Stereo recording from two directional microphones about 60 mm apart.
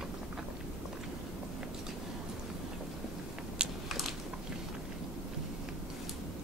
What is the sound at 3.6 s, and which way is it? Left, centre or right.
Biting, centre.